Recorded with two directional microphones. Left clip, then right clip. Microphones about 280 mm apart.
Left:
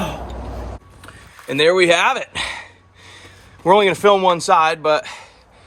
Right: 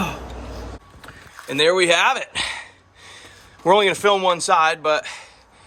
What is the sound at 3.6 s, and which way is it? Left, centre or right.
Speech, centre.